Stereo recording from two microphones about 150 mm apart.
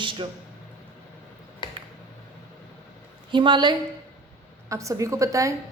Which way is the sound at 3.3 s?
30° right (ahead or behind).